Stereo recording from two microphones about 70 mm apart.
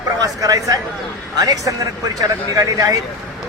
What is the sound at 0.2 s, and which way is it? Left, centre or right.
Speech, right.